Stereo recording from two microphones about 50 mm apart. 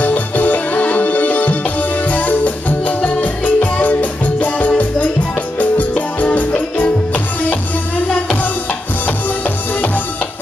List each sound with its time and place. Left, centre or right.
0.0 s music: left